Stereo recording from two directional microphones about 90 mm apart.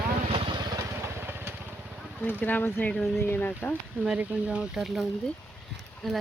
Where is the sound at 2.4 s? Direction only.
20° left (ahead or behind).